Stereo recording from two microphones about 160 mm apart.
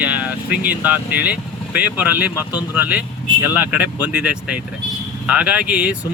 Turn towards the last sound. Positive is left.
turn(degrees=-5)  # may be behind; listen again after turning